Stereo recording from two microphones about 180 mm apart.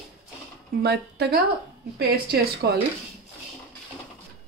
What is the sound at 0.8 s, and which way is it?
Speech, 65° right (ahead or behind).